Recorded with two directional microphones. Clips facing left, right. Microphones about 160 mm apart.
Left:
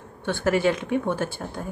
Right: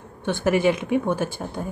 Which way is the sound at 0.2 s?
15° right (ahead or behind).